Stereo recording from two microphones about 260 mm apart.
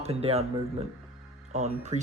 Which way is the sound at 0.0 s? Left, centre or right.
Right.